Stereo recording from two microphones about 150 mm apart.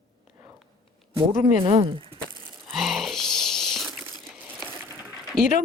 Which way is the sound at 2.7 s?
Centre (ahead or behind).